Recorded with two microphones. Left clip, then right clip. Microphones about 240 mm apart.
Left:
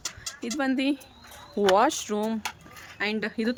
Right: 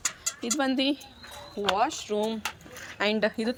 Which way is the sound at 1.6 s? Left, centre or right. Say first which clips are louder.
Left 5 dB; left.